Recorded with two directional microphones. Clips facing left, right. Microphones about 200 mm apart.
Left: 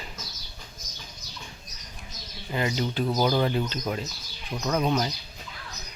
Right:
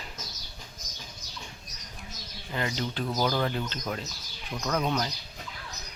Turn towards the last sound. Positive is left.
turn(degrees=10)  # may be behind; listen again after turning